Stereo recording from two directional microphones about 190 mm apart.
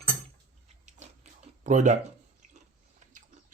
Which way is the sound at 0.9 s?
40° right (ahead or behind).